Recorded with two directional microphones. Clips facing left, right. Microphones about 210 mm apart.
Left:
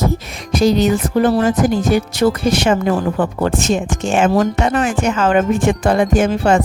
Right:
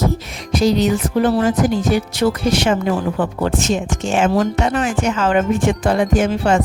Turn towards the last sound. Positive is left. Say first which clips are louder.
# left 2 dB
turn(degrees=50)  # may be behind; listen again after turning